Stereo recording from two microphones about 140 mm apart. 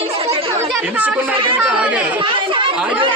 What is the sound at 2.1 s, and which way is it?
Speech, 35° right (ahead or behind).